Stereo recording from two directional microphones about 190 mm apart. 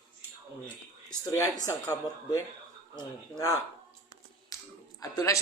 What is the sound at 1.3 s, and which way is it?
Speech, 15° left (ahead or behind).